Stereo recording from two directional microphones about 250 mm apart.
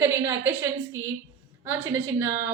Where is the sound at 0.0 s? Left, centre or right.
Centre.